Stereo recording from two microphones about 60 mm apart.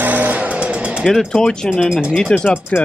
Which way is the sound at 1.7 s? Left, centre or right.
Centre.